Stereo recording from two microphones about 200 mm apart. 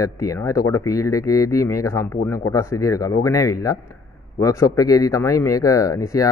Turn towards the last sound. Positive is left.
turn(degrees=15)  # may be behind; listen again after turning